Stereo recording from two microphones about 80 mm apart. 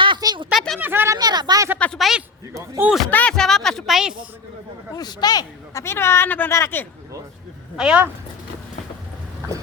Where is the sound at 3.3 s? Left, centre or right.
Centre.